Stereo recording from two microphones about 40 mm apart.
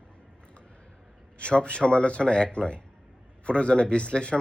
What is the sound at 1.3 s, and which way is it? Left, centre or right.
Speech, left.